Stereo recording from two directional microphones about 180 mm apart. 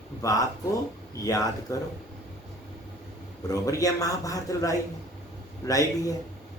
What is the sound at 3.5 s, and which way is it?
Speech, 20° left (ahead or behind).